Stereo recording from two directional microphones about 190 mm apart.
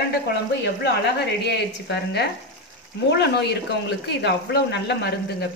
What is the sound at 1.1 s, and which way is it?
Speech, 60° left (ahead or behind).